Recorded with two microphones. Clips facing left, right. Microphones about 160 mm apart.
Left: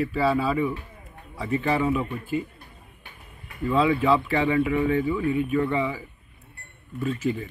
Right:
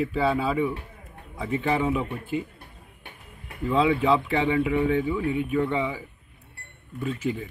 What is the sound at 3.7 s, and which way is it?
Speech, 15° right (ahead or behind).